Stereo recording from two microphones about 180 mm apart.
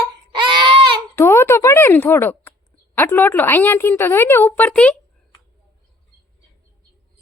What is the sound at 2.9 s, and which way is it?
A woman's voice, 10° left (ahead or behind).